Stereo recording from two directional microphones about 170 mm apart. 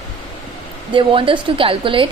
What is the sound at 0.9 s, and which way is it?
A woman's voice, 30° right (ahead or behind).